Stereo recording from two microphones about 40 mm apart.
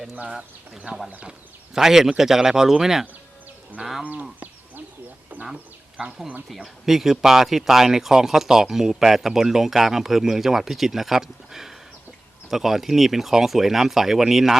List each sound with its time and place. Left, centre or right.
0.9 s speech: right
1.7 s speech: centre
5.3 s a sound: right
6.8 s speech: centre